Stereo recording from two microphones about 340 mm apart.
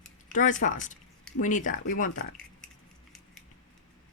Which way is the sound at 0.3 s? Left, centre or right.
Left.